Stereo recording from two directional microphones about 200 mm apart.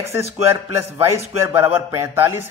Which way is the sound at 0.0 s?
15° right (ahead or behind).